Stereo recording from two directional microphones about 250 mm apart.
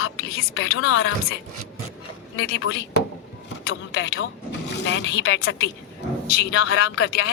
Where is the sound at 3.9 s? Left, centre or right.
Left.